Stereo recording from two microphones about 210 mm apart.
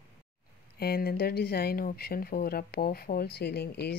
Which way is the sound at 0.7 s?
45° left (ahead or behind).